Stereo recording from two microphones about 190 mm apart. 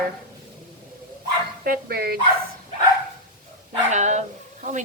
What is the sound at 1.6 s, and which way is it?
Speech, 50° right (ahead or behind).